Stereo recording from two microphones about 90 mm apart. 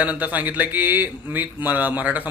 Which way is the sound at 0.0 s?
15° right (ahead or behind).